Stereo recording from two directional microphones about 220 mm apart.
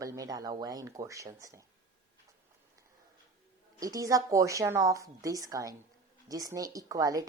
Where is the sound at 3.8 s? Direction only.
15° right (ahead or behind).